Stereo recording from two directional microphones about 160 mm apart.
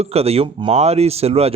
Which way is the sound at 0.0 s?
40° right (ahead or behind).